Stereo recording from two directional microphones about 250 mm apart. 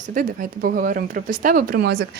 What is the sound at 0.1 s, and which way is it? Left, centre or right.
Speech, right.